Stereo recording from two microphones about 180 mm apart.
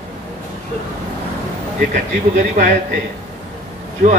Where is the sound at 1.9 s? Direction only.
45° right (ahead or behind).